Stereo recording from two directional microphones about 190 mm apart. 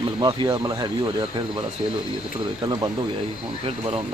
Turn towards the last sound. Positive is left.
turn(degrees=-30)  # may be behind; listen again after turning